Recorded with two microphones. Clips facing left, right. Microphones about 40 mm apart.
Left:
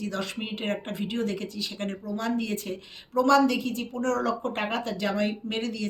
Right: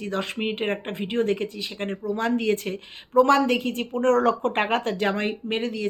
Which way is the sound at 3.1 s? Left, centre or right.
Right.